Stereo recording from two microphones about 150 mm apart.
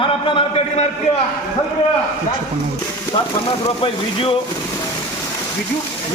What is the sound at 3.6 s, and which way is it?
Speech, 40° left (ahead or behind).